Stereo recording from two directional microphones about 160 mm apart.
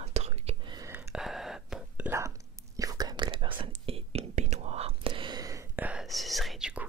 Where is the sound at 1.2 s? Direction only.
Centre (ahead or behind).